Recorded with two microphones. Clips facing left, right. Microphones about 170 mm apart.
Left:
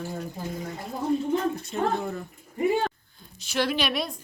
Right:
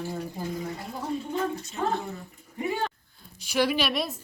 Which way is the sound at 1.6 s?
55° left (ahead or behind).